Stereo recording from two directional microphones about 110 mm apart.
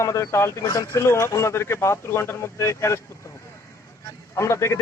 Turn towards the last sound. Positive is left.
turn(degrees=25)  # may be behind; listen again after turning